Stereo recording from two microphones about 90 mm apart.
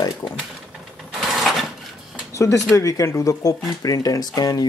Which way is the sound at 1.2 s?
Centre (ahead or behind).